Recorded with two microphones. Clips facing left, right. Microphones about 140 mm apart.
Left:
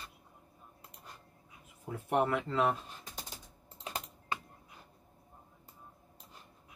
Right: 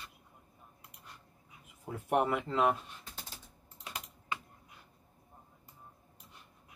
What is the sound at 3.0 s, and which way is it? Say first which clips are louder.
Computer keyboard: left 2 dB; 15° left (ahead or behind).